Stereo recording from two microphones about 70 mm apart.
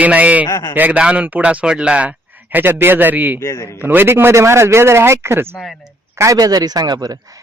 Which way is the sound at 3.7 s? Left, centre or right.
Right.